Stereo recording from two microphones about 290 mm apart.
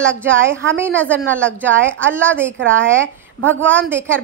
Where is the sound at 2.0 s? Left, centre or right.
Centre.